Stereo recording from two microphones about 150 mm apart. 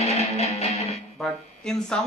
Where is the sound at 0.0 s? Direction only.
45° left (ahead or behind).